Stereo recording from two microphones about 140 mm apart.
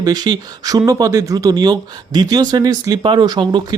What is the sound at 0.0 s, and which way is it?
Speech, 30° right (ahead or behind).